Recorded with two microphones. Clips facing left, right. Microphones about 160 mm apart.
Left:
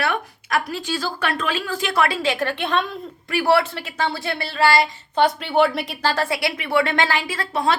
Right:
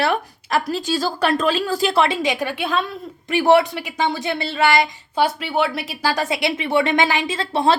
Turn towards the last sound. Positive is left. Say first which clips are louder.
# right 3 dB
turn(degrees=-30)  # may be behind; listen again after turning